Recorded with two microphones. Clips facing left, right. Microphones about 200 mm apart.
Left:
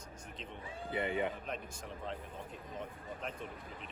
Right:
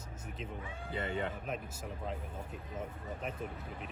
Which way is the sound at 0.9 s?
15° left (ahead or behind).